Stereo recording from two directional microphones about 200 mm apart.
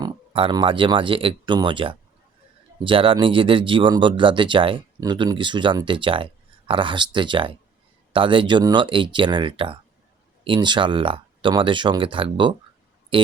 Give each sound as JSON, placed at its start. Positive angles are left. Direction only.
{"t": 0.0, "sound": "speech", "side_deg": -25}